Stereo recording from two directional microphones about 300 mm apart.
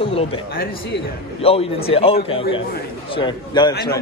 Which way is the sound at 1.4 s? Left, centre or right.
Centre.